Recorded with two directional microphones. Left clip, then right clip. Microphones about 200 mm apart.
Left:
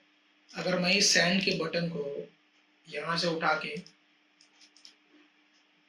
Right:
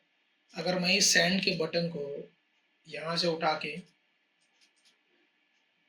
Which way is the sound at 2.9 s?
45° right (ahead or behind).